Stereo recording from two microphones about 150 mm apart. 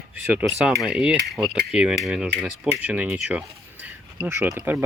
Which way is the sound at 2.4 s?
10° right (ahead or behind).